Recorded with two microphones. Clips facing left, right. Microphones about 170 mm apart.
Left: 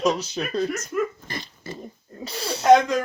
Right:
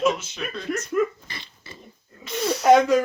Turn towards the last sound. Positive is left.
turn(degrees=-5)  # may be behind; listen again after turning